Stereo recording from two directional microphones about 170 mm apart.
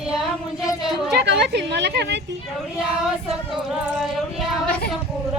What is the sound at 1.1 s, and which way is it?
A woman's voice, 80° right.